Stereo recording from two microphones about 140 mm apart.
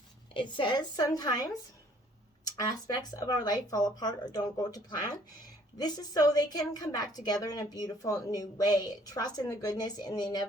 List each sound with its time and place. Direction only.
0.3 s a woman's voice: 35° left (ahead or behind)
2.6 s a woman's voice: 30° left (ahead or behind)